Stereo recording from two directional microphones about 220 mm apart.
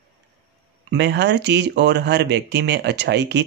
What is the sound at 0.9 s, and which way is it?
Speech, 50° right (ahead or behind).